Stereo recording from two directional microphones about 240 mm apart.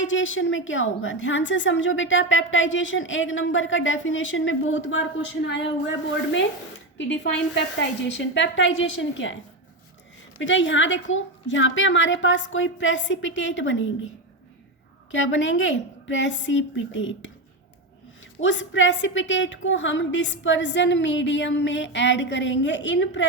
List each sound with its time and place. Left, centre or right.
0.0 s a woman's voice: left
10.3 s a woman's voice: left
15.1 s a woman's voice: left
18.3 s a woman's voice: left